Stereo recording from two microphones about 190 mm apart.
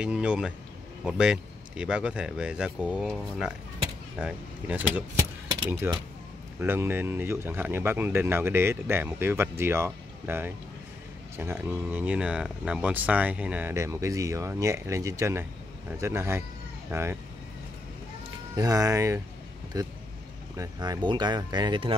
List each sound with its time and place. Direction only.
0.0 s speech: 5° right (ahead or behind)
18.6 s speech: 15° right (ahead or behind)